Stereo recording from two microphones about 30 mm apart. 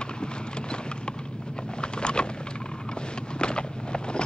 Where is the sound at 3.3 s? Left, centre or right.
Left.